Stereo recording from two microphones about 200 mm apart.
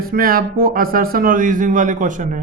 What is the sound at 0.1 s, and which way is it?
Speech, 45° right (ahead or behind).